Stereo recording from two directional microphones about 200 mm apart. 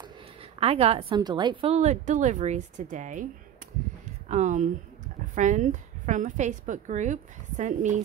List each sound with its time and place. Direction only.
0.0 s a woman's voice: 30° right (ahead or behind)
4.3 s a woman's voice: 35° right (ahead or behind)